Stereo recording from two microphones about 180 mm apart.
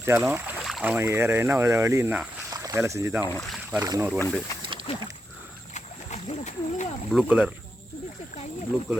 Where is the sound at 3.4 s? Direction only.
5° right (ahead or behind).